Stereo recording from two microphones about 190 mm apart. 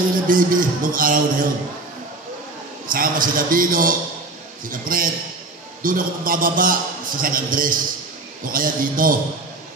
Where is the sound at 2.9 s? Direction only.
45° right (ahead or behind).